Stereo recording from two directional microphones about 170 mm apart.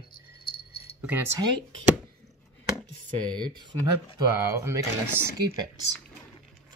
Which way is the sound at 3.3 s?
25° right (ahead or behind).